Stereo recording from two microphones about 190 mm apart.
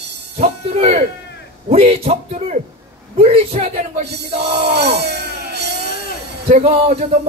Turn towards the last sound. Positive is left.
turn(degrees=-35)  # may be behind; listen again after turning